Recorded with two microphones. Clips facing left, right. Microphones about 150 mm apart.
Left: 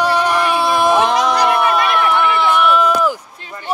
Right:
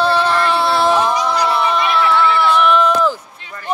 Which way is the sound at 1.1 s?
90° left.